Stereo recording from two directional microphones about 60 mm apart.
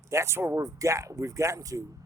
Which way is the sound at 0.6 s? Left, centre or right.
Right.